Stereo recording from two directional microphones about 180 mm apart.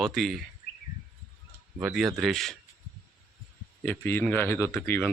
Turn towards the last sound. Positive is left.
turn(degrees=10)  # may be behind; listen again after turning